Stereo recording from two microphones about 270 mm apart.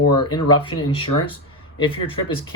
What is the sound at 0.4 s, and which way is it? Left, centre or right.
Speech, centre.